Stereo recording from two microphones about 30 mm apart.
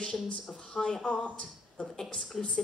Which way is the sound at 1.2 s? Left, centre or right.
Left.